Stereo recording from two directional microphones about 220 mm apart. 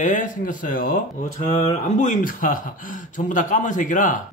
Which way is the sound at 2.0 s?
35° left (ahead or behind).